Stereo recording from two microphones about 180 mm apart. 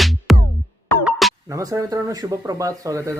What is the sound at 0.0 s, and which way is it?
Music, centre (ahead or behind).